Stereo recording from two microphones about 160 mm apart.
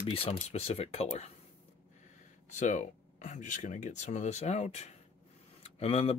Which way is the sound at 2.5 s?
50° left (ahead or behind).